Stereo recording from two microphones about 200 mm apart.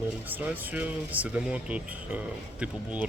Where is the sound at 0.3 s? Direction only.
10° right (ahead or behind).